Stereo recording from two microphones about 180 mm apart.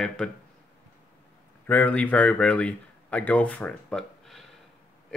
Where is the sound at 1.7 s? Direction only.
10° left (ahead or behind).